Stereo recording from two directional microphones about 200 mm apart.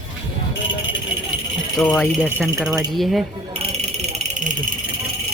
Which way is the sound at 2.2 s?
5° right (ahead or behind).